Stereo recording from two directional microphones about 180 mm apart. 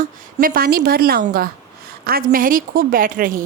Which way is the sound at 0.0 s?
55° right (ahead or behind).